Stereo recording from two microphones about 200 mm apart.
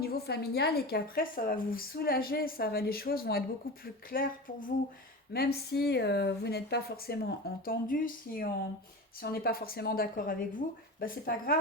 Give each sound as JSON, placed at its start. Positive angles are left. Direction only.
{"t": 0.0, "sound": "a woman's voice", "side_deg": 50}